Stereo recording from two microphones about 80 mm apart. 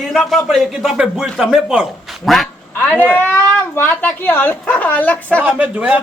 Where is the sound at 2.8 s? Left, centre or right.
Left.